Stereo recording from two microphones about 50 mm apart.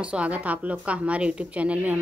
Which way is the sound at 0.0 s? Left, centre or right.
Right.